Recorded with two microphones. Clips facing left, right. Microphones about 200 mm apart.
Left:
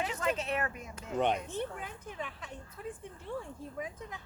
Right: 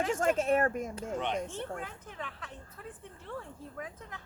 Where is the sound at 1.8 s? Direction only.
15° left (ahead or behind).